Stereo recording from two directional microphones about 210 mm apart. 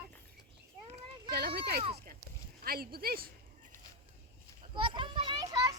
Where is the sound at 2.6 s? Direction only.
45° right (ahead or behind).